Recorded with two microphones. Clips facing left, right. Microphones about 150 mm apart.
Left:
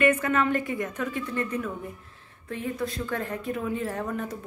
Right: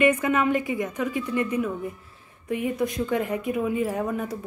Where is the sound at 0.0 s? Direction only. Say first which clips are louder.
Right 2 dB; 15° right (ahead or behind).